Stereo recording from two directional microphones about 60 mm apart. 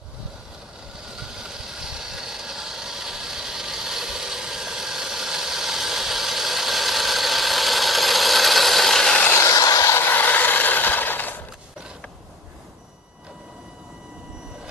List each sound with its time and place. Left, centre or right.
1.3 s vehicle: centre
9.3 s vehicle: left
9.9 s rub: left